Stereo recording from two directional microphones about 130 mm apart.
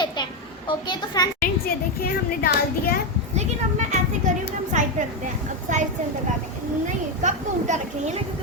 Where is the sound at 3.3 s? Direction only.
65° right (ahead or behind).